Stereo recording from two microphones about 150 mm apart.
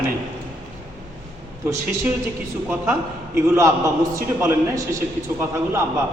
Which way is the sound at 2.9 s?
20° right (ahead or behind).